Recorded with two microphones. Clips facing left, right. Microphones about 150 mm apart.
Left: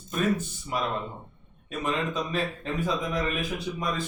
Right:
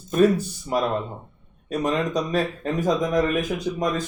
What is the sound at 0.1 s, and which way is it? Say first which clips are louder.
Speech: right 8 dB; 40° right (ahead or behind).